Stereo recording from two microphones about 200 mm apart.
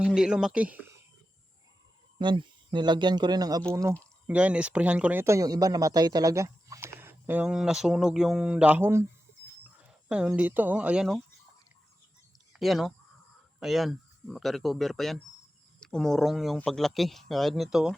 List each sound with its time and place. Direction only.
0.0 s speech: 5° right (ahead or behind)
2.1 s speech: 25° right (ahead or behind)
10.1 s speech: 5° right (ahead or behind)
12.5 s speech: centre (ahead or behind)